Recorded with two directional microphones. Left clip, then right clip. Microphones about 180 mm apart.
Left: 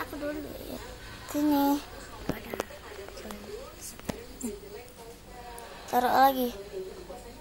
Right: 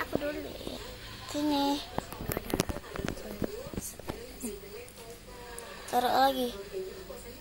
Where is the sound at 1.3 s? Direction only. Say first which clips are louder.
Left 3 dB; 15° left (ahead or behind).